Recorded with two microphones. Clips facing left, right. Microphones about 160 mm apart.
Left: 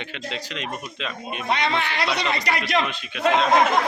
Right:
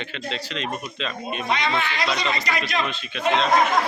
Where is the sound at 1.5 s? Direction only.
65° left (ahead or behind).